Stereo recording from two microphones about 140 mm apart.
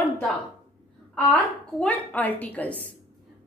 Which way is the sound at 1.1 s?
10° left (ahead or behind).